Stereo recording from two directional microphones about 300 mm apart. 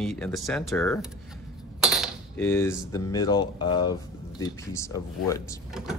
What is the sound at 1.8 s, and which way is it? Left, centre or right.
Cutlery, centre.